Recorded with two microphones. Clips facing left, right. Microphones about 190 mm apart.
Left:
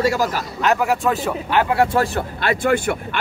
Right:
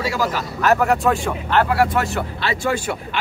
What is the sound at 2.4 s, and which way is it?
Speech, 55° left (ahead or behind).